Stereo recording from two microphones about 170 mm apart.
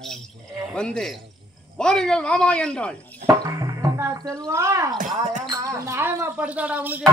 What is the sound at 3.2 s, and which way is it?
Speech, 20° right (ahead or behind).